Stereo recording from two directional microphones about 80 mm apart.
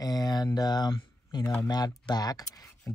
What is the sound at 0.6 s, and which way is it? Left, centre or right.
Speech, left.